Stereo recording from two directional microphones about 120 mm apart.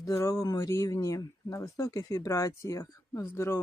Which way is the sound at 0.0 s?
25° left (ahead or behind).